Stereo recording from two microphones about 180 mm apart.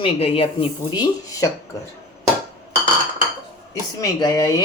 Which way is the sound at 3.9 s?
20° left (ahead or behind).